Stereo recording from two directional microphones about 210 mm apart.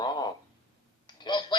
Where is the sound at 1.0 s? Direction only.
20° left (ahead or behind).